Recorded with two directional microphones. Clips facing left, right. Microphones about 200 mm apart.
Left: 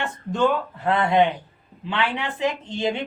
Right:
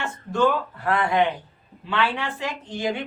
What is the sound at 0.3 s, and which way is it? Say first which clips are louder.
A woman's voice: even; 20° left (ahead or behind).